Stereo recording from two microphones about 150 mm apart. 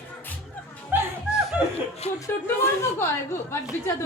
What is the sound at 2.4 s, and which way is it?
Speech, 15° left (ahead or behind).